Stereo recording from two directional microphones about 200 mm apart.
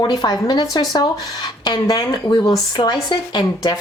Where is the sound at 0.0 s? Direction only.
20° left (ahead or behind).